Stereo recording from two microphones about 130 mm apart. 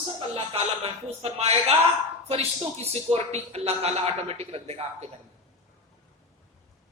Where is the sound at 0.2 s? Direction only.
45° right (ahead or behind).